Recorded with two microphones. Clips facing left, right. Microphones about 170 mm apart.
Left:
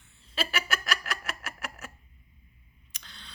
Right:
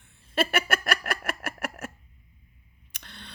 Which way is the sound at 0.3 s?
55° right (ahead or behind).